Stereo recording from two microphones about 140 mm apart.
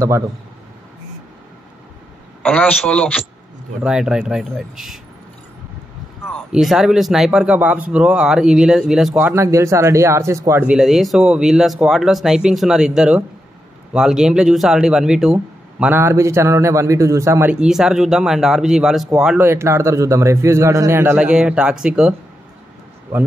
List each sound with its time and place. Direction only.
2.4 s a man's voice: 10° left (ahead or behind)
3.8 s speech: 5° right (ahead or behind)
6.5 s speech: centre (ahead or behind)
9.3 s a man's voice: 20° right (ahead or behind)
10.7 s speech: 5° right (ahead or behind)
15.3 s a man's voice: 15° right (ahead or behind)
19.4 s a man's voice: 20° right (ahead or behind)
21.2 s a man's voice: 5° right (ahead or behind)